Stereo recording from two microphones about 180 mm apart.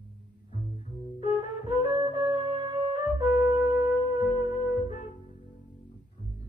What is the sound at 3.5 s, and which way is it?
Wind instrument, 20° right (ahead or behind).